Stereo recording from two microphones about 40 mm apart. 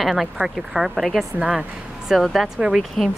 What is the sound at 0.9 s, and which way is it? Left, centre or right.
Speech, centre.